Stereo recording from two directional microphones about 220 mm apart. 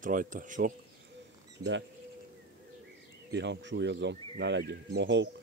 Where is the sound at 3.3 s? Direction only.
55° right (ahead or behind).